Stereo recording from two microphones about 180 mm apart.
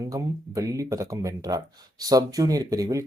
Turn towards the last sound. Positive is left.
turn(degrees=-20)  # may be behind; listen again after turning